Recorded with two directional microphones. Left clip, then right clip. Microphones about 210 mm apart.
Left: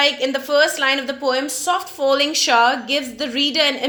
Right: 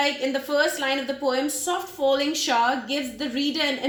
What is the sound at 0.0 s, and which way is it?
A woman's voice, 20° left (ahead or behind).